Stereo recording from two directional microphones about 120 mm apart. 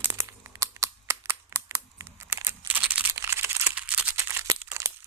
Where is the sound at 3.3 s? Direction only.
20° right (ahead or behind).